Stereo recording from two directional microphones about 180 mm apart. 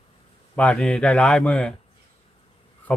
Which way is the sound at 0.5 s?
5° left (ahead or behind).